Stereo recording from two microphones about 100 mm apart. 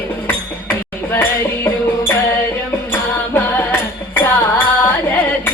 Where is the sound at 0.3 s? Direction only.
20° left (ahead or behind).